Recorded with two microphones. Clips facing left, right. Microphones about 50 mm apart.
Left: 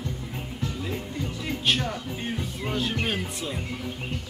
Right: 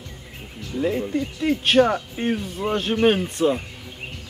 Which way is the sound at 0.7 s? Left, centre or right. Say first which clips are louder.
Right 15 dB; right.